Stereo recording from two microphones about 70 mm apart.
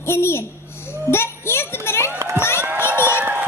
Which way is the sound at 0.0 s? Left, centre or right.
Left.